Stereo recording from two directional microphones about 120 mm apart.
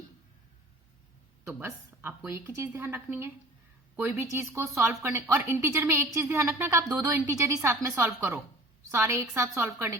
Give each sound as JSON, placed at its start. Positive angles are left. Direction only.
{"t": 1.5, "sound": "speech", "side_deg": -20}